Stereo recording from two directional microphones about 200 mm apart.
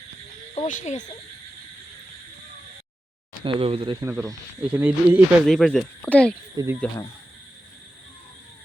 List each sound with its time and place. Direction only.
0.5 s speech: 40° left (ahead or behind)
3.4 s speech: 25° right (ahead or behind)
4.0 s speech: 10° right (ahead or behind); by 6.3 s 5° left (ahead or behind)
6.6 s speech: 20° right (ahead or behind)